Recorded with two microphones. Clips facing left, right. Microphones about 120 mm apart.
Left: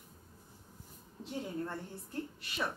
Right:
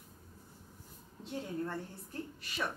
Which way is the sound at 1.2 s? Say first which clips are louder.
Even; centre (ahead or behind).